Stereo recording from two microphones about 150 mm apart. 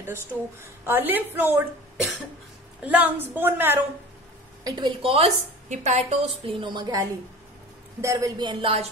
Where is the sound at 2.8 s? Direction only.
10° right (ahead or behind).